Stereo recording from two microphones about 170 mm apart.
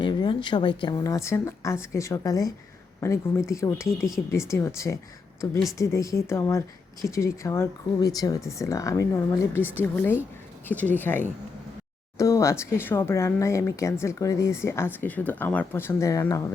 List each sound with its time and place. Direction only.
0.0 s speech: 25° left (ahead or behind)